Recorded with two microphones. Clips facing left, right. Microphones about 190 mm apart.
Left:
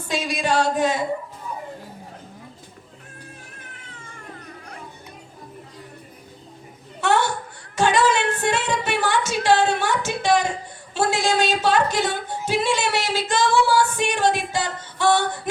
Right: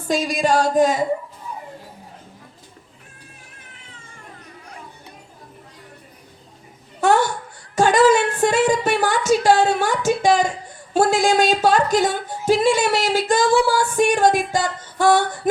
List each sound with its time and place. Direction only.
0.1 s speech: 45° right (ahead or behind)
7.8 s speech: 45° right (ahead or behind)